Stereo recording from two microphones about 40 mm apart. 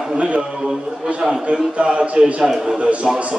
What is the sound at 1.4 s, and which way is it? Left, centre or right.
Speech, right.